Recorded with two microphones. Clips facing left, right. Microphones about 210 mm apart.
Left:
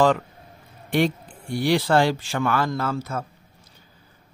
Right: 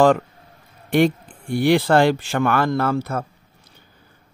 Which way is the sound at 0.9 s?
55° right (ahead or behind).